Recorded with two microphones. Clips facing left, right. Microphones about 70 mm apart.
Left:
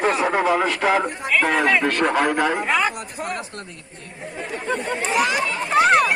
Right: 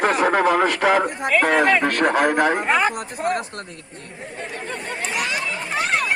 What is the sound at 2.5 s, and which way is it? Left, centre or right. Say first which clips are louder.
Speech: right 2 dB; right.